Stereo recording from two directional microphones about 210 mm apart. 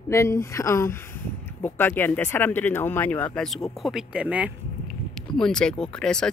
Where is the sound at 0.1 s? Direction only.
15° left (ahead or behind).